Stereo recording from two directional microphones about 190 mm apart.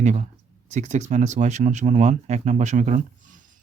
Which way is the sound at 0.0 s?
40° right (ahead or behind).